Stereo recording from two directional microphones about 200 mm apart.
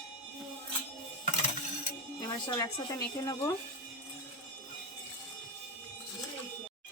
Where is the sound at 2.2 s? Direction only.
20° left (ahead or behind).